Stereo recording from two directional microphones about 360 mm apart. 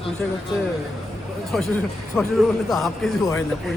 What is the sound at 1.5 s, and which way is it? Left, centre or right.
Speech, centre.